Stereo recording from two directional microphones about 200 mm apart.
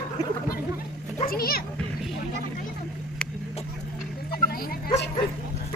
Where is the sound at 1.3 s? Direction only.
50° left (ahead or behind).